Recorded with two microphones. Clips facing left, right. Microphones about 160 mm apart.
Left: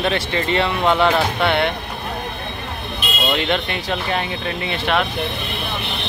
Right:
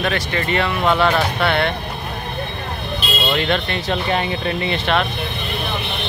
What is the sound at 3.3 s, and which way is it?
Speech, 15° left (ahead or behind).